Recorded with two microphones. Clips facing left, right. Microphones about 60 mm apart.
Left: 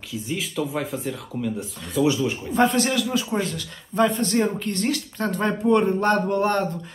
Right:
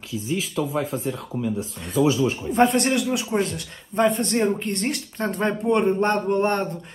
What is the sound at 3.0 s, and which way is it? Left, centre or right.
Speech, centre.